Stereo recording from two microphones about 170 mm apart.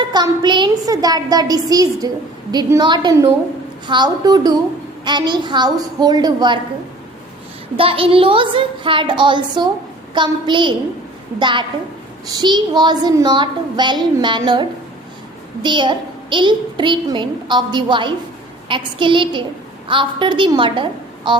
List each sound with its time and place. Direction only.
0.0 s a woman's voice: 25° right (ahead or behind)
7.8 s a woman's voice: 35° right (ahead or behind)